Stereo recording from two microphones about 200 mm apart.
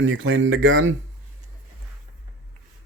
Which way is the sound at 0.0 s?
75° right (ahead or behind).